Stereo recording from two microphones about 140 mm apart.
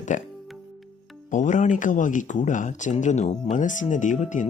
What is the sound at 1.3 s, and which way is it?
Speech, 60° left (ahead or behind).